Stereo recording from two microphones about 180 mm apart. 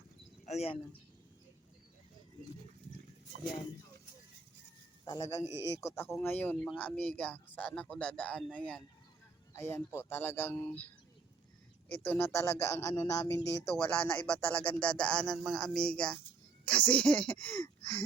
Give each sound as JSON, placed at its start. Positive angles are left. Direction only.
{"t": 0.4, "sound": "speech", "side_deg": 35}
{"t": 5.0, "sound": "speech", "side_deg": 20}
{"t": 12.0, "sound": "speech", "side_deg": 15}